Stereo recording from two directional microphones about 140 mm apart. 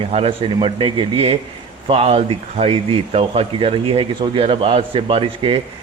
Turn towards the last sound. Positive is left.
turn(degrees=-45)  # may be behind; listen again after turning